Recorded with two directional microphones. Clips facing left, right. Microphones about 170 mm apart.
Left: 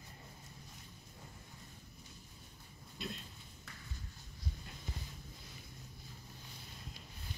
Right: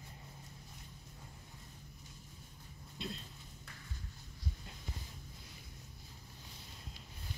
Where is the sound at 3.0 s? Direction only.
25° right (ahead or behind).